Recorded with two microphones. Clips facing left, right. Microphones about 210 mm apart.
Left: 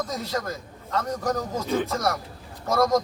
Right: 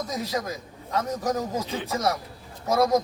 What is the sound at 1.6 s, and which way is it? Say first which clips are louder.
Speech: left 7 dB; 50° left (ahead or behind).